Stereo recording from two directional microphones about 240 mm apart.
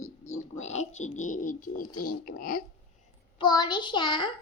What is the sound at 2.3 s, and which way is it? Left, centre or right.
Speech, left.